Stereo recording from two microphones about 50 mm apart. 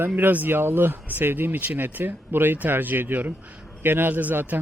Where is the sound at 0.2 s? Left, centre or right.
Right.